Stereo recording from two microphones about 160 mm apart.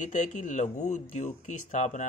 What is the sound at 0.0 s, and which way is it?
Speech, 50° left (ahead or behind).